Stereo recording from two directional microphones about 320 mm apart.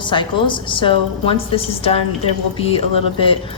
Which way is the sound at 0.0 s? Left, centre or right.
Centre.